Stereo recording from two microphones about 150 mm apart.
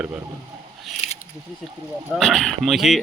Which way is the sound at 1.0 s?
40° left (ahead or behind).